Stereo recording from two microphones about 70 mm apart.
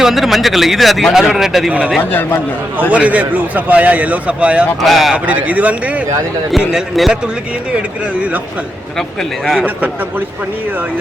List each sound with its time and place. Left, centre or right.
0.0 s speech: centre
2.0 s a man's voice: left
2.9 s a man's voice: right
4.8 s speech: centre
5.1 s a man's voice: right
6.6 s a man's voice: centre
9.0 s speech: centre
9.6 s a man's voice: right